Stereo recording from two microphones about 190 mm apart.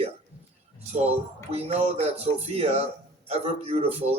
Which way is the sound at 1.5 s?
35° right (ahead or behind).